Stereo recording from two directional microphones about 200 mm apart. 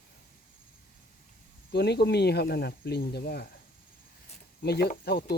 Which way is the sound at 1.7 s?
55° left (ahead or behind).